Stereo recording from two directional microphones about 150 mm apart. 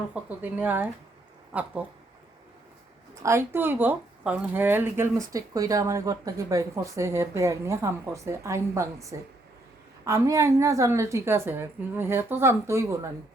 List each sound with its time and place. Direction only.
0.1 s speech: 10° right (ahead or behind)
3.2 s speech: 15° right (ahead or behind)